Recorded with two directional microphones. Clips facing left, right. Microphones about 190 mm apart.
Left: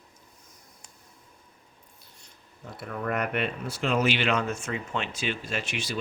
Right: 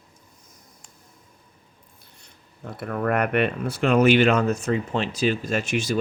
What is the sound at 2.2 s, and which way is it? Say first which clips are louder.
Speech: right 6 dB; 60° right (ahead or behind).